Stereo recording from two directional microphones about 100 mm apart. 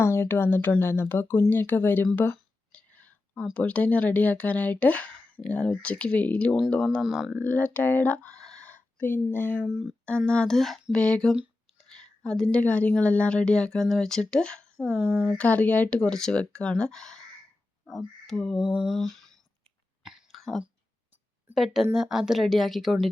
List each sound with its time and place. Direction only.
0.0 s speech: 25° left (ahead or behind)
2.3 s a sound: 15° left (ahead or behind)
3.5 s a woman's voice: 10° left (ahead or behind)
7.3 s speech: 15° left (ahead or behind)
9.6 s a woman's voice: 5° left (ahead or behind)
18.6 s a sound: 5° right (ahead or behind)
20.0 s cough: 5° right (ahead or behind)
21.5 s speech: 5° right (ahead or behind)